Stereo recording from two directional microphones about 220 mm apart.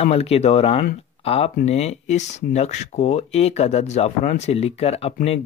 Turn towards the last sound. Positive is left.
turn(degrees=30)  # may be behind; listen again after turning